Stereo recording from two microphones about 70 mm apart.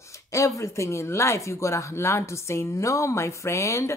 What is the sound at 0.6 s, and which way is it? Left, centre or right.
Speech, left.